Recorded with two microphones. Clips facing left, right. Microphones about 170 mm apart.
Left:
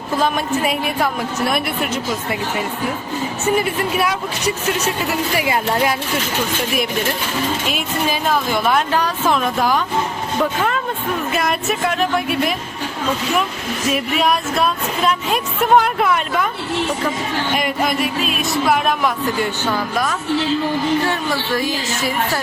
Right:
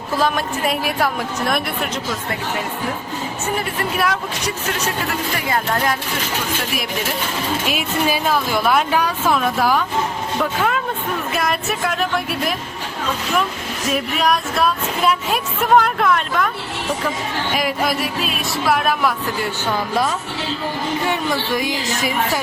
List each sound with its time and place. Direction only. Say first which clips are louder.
0.2 s music: left 1 dB; centre (ahead or behind)
3.6 s music: left 2 dB; 5° left (ahead or behind)
5.5 s speech: even; 5° left (ahead or behind)
7.7 s music: right 1 dB; 5° right (ahead or behind)
11.3 s music: left 1 dB; centre (ahead or behind)
13.9 s music: even; centre (ahead or behind)
17.5 s music: even; centre (ahead or behind)
21.1 s a woman's voice: even; 15° right (ahead or behind)